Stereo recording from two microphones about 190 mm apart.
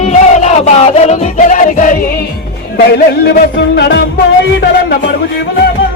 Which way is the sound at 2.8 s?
55° left (ahead or behind).